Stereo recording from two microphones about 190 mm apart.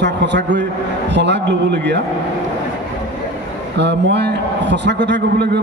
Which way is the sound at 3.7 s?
65° right (ahead or behind).